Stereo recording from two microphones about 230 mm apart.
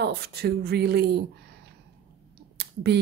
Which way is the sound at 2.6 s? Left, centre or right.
Right.